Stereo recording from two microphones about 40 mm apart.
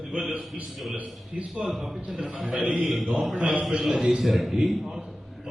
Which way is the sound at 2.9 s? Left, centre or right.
Centre.